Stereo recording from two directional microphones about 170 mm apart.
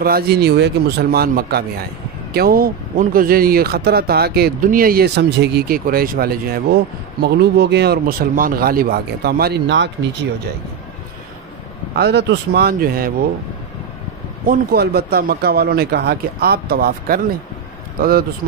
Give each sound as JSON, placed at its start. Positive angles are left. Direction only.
{"t": 0.0, "sound": "speech", "side_deg": -65}
{"t": 7.2, "sound": "speech", "side_deg": -75}
{"t": 11.9, "sound": "speech", "side_deg": -75}
{"t": 14.5, "sound": "a man's voice", "side_deg": -65}